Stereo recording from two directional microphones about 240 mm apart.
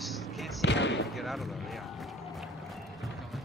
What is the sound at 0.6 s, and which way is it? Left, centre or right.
Basketball bounce, left.